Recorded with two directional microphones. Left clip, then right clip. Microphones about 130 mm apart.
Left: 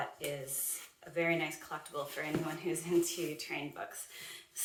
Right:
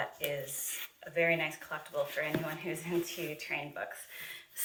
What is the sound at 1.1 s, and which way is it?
Speech, 40° left (ahead or behind).